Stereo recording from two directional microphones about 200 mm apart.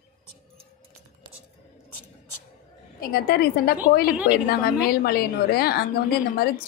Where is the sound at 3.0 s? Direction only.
50° left (ahead or behind).